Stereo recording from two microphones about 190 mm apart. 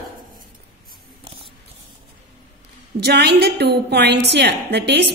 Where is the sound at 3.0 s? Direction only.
55° right (ahead or behind).